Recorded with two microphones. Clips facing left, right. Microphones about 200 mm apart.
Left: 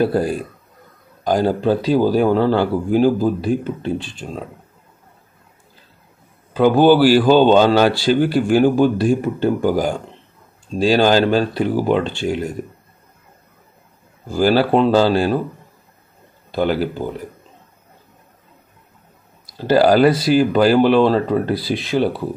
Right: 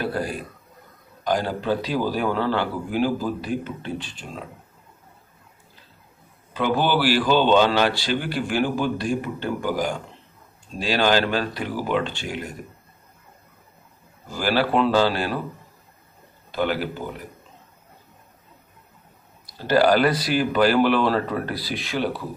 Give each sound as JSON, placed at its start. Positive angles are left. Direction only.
{"t": 0.0, "sound": "speech", "side_deg": 30}
{"t": 1.2, "sound": "speech", "side_deg": 45}
{"t": 6.5, "sound": "a man's voice", "side_deg": 40}
{"t": 10.8, "sound": "speech", "side_deg": 30}
{"t": 14.4, "sound": "speech", "side_deg": 35}
{"t": 16.5, "sound": "speech", "side_deg": 30}
{"t": 19.6, "sound": "speech", "side_deg": 35}